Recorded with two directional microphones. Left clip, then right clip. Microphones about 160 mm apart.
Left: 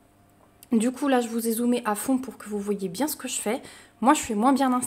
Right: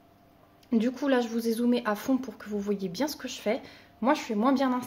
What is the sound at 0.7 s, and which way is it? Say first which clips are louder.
A woman's voice: left 3 dB; 30° left (ahead or behind).